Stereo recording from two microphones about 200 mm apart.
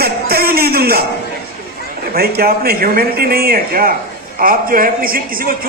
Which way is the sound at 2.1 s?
50° right (ahead or behind).